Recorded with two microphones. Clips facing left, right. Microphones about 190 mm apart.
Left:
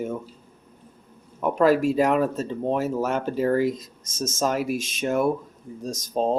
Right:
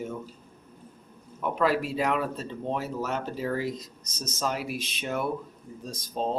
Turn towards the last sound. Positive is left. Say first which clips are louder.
# left 6 dB
turn(degrees=45)  # may be behind; listen again after turning